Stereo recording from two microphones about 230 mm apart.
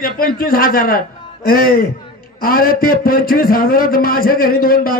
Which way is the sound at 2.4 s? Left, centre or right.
Left.